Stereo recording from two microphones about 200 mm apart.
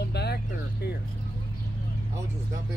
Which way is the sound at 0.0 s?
55° left (ahead or behind).